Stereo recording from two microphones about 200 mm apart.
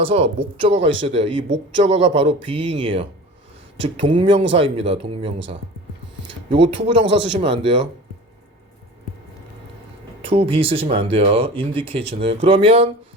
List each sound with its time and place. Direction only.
0.0 s speech: 30° right (ahead or behind)
10.2 s speech: 30° right (ahead or behind)